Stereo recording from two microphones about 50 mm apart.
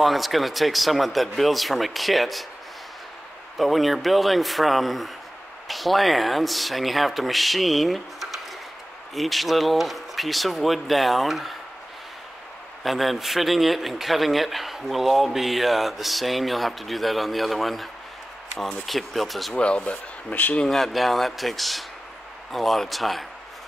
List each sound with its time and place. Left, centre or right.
0.0 s a man's voice: centre
3.5 s a man's voice: centre
12.8 s a man's voice: centre
18.9 s a man's voice: centre
19.5 s speech: left
20.6 s a man's voice: centre